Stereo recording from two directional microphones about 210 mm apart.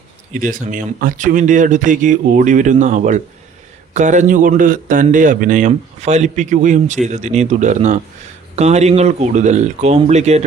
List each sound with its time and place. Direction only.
0.3 s speech: 40° right (ahead or behind)